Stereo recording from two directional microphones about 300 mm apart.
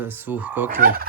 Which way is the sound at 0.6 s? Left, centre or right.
Right.